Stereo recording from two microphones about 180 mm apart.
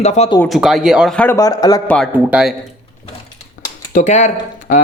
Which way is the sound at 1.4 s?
20° left (ahead or behind).